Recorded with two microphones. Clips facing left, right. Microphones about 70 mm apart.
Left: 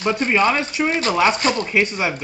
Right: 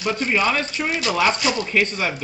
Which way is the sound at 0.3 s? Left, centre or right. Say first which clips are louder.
Left 3 dB; centre.